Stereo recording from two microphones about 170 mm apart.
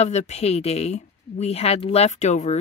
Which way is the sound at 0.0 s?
40° left (ahead or behind).